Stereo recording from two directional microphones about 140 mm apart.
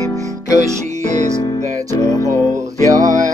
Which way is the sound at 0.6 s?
60° right (ahead or behind).